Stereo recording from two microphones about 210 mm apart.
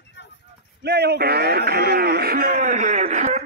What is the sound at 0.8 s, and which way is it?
A man's voice, 50° right (ahead or behind).